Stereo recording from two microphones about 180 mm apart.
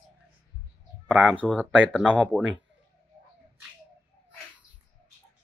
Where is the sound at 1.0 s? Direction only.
5° right (ahead or behind).